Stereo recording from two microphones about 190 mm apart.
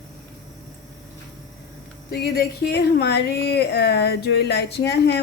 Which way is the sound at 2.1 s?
55° left (ahead or behind).